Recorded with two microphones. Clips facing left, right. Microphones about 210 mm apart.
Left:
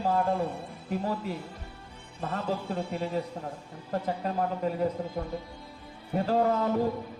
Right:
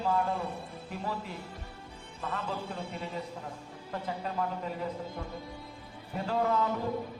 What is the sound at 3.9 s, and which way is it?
A man's voice, 45° left (ahead or behind).